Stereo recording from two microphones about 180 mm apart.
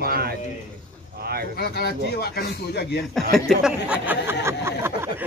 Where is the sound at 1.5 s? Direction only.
60° left (ahead or behind).